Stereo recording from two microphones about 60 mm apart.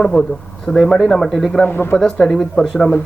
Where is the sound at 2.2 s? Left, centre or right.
Centre.